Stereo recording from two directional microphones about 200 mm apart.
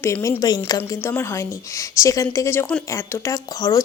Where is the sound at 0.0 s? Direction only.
15° left (ahead or behind).